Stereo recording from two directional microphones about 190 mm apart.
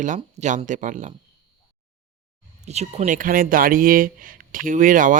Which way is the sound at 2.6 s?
35° right (ahead or behind).